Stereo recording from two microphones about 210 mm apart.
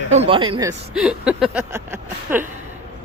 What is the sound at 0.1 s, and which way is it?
Speech, 30° right (ahead or behind).